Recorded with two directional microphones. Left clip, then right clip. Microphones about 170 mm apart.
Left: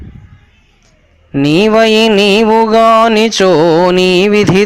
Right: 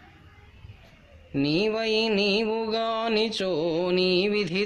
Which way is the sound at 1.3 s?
45° left (ahead or behind).